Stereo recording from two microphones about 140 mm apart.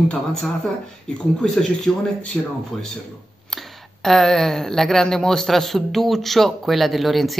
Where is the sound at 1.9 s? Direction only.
5° left (ahead or behind).